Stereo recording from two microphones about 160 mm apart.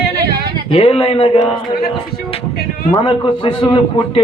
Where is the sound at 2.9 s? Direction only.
30° left (ahead or behind).